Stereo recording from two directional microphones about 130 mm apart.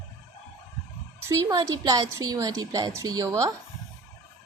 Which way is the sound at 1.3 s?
30° right (ahead or behind).